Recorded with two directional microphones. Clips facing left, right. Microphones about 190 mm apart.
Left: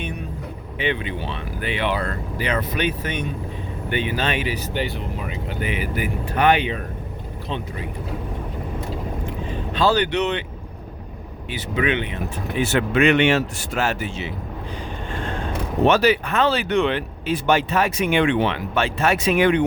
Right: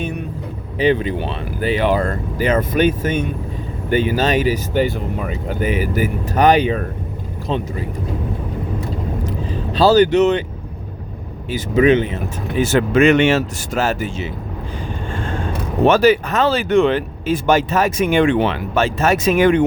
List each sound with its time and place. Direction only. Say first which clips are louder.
0.8 s speech: right 8 dB; 40° right (ahead or behind)
9.2 s vehicle: right 4 dB; 40° right (ahead or behind)
11.5 s speech: right 9 dB; 45° right (ahead or behind)
15.9 s speech: right 5 dB; 45° right (ahead or behind)